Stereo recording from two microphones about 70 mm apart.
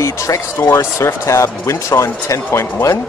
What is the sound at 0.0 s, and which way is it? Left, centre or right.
Speech, left.